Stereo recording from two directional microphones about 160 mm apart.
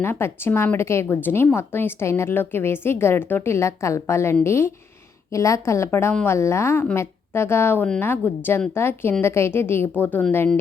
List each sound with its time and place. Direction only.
0.0 s a woman's voice: 15° left (ahead or behind)